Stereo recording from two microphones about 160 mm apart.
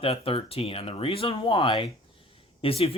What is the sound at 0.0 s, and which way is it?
Speech, 35° left (ahead or behind).